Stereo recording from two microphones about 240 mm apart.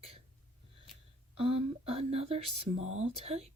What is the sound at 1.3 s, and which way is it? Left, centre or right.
Speech, right.